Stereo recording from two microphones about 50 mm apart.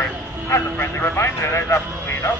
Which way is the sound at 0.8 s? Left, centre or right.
Left.